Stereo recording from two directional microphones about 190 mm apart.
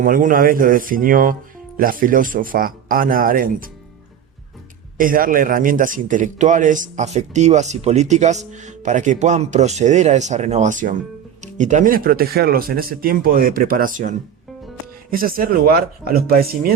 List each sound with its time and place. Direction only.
0.0 s speech: 45° right (ahead or behind)
4.9 s a man's voice: 45° right (ahead or behind)